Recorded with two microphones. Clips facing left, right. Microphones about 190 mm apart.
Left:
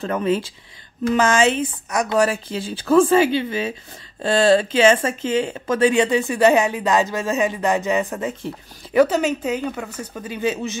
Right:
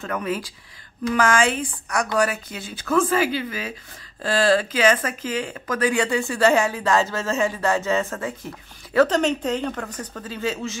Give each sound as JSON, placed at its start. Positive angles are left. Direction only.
{"t": 0.0, "sound": "speech", "side_deg": 25}
{"t": 8.9, "sound": "speech", "side_deg": 10}